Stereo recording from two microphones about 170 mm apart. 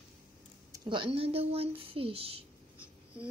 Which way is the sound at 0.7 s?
25° right (ahead or behind).